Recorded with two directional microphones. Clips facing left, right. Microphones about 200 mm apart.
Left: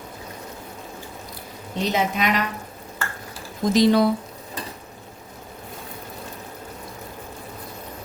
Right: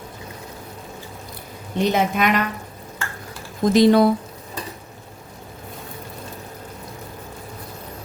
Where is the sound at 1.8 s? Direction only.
55° right (ahead or behind).